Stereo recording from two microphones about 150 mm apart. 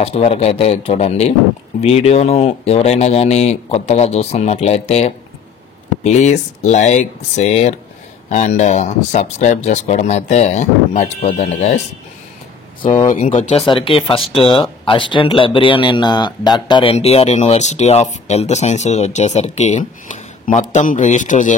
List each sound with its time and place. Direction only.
0.0 s speech: 45° left (ahead or behind)
12.8 s speech: 35° left (ahead or behind)
13.4 s speech: 50° left (ahead or behind)
13.7 s speech: 35° left (ahead or behind)
16.9 s speech: 40° left (ahead or behind)